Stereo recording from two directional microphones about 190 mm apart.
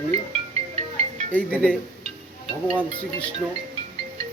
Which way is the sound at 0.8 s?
35° right (ahead or behind).